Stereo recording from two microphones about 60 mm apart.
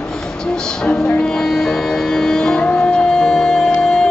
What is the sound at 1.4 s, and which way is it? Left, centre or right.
Music, centre.